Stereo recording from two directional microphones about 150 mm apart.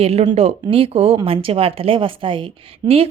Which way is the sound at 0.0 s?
45° right (ahead or behind).